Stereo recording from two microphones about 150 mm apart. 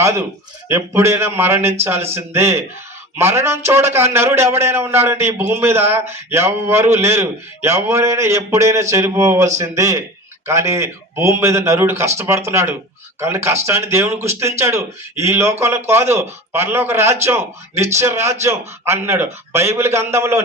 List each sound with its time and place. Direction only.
0.7 s a man's voice: 15° right (ahead or behind)